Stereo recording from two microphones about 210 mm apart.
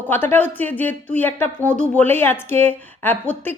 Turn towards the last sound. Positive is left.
turn(degrees=10)  # may be behind; listen again after turning